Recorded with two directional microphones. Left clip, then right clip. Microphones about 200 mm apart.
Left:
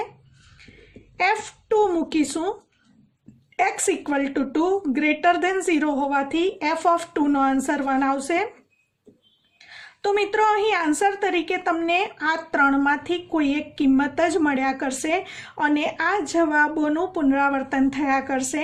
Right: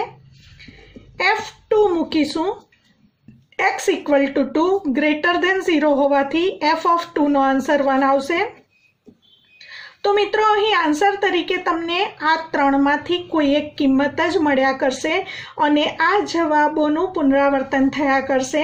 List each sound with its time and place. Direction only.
1.7 s a sound: 45° left (ahead or behind)
3.5 s a woman's voice: 45° left (ahead or behind)
9.6 s a woman's voice: 45° left (ahead or behind)